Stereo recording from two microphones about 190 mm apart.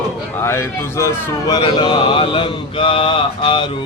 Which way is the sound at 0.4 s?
15° left (ahead or behind).